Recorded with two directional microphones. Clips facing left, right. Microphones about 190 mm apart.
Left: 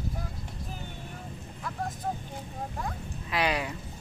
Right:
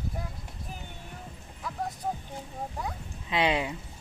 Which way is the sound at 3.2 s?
20° right (ahead or behind).